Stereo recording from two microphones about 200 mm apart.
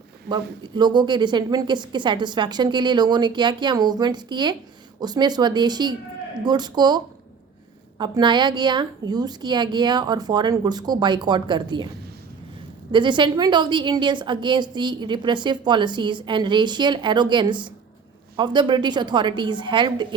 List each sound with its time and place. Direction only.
0.3 s a woman's voice: 20° right (ahead or behind)
12.9 s a woman's voice: 25° right (ahead or behind)